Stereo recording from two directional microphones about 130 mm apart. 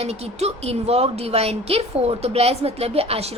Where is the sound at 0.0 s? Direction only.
55° right (ahead or behind).